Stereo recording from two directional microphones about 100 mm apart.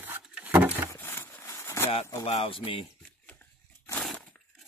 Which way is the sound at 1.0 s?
25° left (ahead or behind).